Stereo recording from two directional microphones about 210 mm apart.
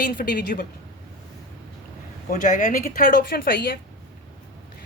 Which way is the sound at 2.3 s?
40° left (ahead or behind).